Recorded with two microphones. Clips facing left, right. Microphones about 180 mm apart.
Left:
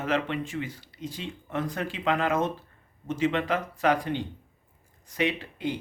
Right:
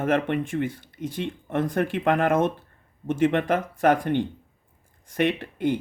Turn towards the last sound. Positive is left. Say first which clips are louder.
# right 6 dB
turn(degrees=-50)  # may be behind; listen again after turning